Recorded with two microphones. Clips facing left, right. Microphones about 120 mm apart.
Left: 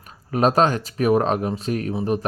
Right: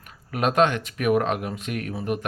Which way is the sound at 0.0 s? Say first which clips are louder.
Left 5 dB; 30° left (ahead or behind).